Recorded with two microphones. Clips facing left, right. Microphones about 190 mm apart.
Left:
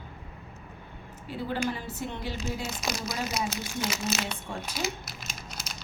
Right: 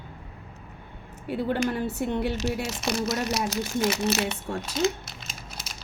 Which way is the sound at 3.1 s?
75° right (ahead or behind).